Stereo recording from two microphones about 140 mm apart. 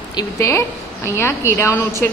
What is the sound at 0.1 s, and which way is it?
A woman's voice, 20° left (ahead or behind).